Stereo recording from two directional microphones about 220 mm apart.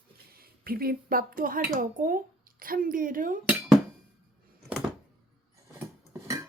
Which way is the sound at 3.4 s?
5° right (ahead or behind).